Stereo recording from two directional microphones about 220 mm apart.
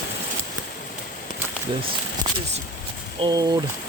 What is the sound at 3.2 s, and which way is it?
Speech, 15° right (ahead or behind).